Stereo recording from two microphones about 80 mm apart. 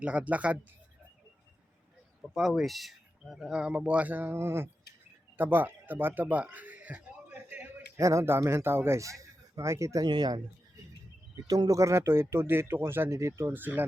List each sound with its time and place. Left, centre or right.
0.0 s speech: centre
2.3 s speech: centre; by 4.7 s right
5.4 s a sound: right
7.9 s speech: right
9.0 s a man's voice: right
10.0 s speech: right
11.4 s speech: right